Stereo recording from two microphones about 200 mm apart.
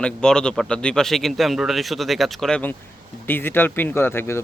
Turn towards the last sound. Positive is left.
turn(degrees=10)  # may be behind; listen again after turning